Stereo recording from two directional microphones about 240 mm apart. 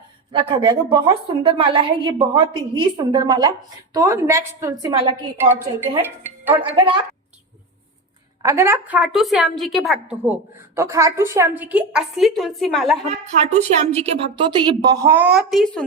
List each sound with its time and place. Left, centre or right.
0.3 s a woman's voice: right
6.7 s a woman's voice: right
8.4 s a woman's voice: centre
10.8 s a woman's voice: centre
13.1 s a woman's voice: right; by 15.8 s centre